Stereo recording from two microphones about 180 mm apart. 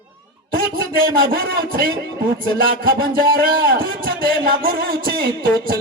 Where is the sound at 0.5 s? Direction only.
55° right (ahead or behind).